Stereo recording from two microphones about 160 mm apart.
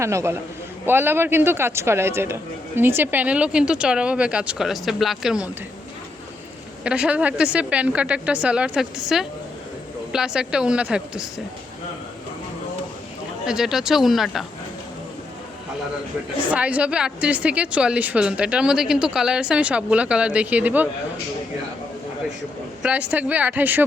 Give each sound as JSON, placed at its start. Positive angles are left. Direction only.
{"t": 0.0, "sound": "speech", "side_deg": -20}
{"t": 6.8, "sound": "a woman's voice", "side_deg": -5}
{"t": 13.4, "sound": "a woman's voice", "side_deg": -5}
{"t": 16.5, "sound": "speech", "side_deg": -10}
{"t": 22.8, "sound": "speech", "side_deg": -10}